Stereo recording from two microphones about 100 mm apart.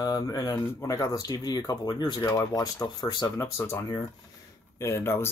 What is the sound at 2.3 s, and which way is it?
Speech, 35° left (ahead or behind).